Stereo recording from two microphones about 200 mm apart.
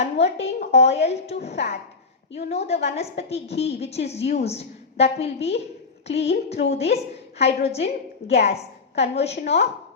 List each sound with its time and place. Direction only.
0.0 s a woman's voice: 30° left (ahead or behind)